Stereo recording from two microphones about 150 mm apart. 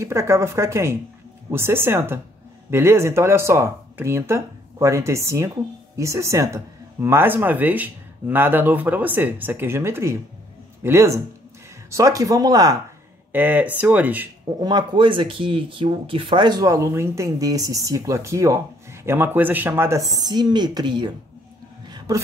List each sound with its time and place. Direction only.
0.0 s speech: 20° right (ahead or behind)
13.3 s speech: 10° right (ahead or behind)
14.6 s speech: 30° right (ahead or behind)
21.8 s gasp: 25° right (ahead or behind)